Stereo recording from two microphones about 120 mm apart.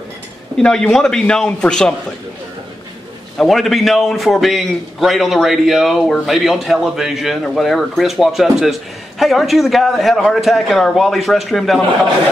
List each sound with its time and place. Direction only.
0.6 s a man's voice: 5° left (ahead or behind)
3.3 s a man's voice: centre (ahead or behind)